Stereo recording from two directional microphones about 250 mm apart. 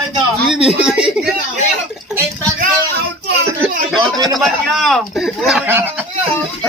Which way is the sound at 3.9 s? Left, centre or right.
Centre.